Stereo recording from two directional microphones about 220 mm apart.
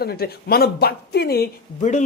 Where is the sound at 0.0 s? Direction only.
45° left (ahead or behind).